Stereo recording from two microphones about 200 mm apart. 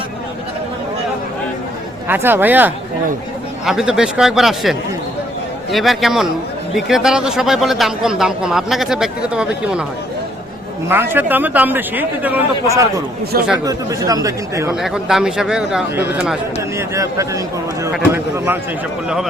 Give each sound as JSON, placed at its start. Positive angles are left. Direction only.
{"t": 2.0, "sound": "speech", "side_deg": -10}
{"t": 10.8, "sound": "speech", "side_deg": -10}
{"t": 14.8, "sound": "speech", "side_deg": 0}
{"t": 16.9, "sound": "speech", "side_deg": -15}